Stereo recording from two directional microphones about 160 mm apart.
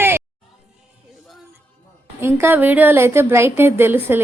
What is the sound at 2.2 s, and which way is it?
A woman's voice, 15° right (ahead or behind).